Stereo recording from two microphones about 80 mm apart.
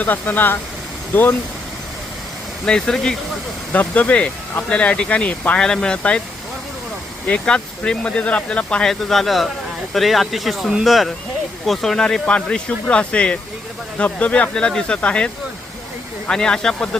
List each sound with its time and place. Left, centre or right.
0.0 s speech: left
2.6 s speech: centre
7.3 s speech: centre
16.3 s speech: centre